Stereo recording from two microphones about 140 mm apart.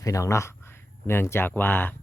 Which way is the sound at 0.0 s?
20° left (ahead or behind).